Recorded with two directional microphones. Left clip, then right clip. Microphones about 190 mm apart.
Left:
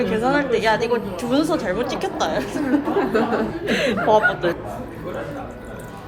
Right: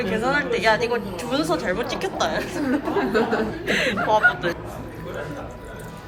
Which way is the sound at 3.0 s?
40° right (ahead or behind).